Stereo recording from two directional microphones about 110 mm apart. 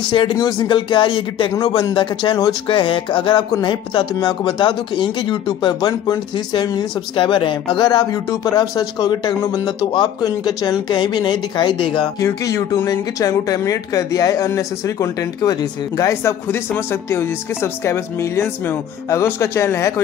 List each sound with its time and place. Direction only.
0.0 s speech: 45° left (ahead or behind)
2.7 s speech: 55° left (ahead or behind)
12.2 s speech: 30° left (ahead or behind)